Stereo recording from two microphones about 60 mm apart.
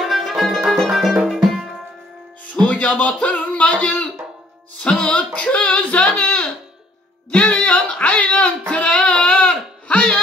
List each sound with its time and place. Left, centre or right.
0.0 s music: centre
2.5 s speech: left
7.2 s a sound: centre